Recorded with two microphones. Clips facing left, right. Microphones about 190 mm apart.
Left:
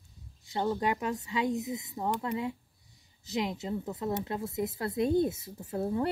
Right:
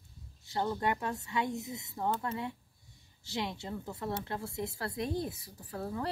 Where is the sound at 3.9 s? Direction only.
20° left (ahead or behind).